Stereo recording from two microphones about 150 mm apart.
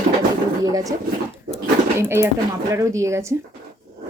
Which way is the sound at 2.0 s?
15° right (ahead or behind).